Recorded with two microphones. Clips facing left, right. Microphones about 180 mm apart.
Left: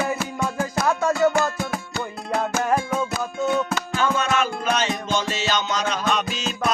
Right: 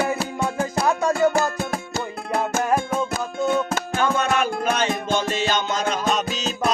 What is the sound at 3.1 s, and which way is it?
Music, 50° right (ahead or behind).